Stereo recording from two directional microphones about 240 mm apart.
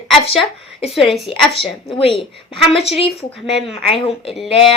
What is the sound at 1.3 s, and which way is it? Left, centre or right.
Speech, left.